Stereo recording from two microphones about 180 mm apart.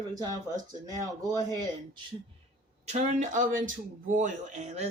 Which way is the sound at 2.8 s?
40° right (ahead or behind).